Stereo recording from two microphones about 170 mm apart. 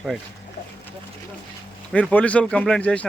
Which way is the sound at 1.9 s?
10° left (ahead or behind).